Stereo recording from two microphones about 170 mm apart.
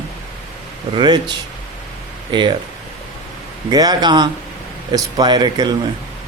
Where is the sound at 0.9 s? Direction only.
25° right (ahead or behind).